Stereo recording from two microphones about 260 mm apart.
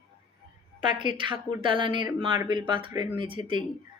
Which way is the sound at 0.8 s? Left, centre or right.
Centre.